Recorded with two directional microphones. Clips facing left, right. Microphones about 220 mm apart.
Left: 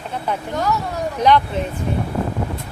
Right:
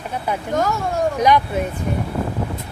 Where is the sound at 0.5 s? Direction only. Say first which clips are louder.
Right 3 dB; 45° right (ahead or behind).